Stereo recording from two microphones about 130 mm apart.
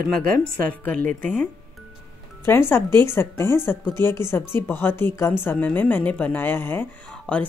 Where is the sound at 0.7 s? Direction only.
10° left (ahead or behind).